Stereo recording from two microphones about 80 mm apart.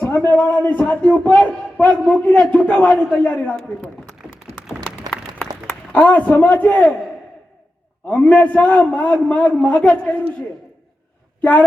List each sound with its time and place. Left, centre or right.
0.3 s a man's voice: left
4.2 s a sound: left
5.9 s a man's voice: centre
8.0 s a man's voice: centre
11.3 s speech: centre